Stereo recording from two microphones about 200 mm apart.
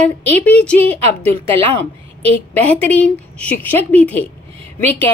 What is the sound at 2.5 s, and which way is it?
A woman's voice, 10° left (ahead or behind).